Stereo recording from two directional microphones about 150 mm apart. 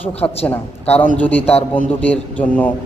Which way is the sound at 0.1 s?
40° left (ahead or behind).